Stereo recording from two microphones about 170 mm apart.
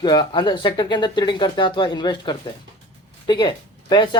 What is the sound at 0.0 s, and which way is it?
Speech, 25° left (ahead or behind).